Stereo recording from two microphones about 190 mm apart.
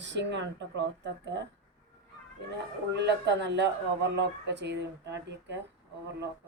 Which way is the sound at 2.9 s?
65° right (ahead or behind).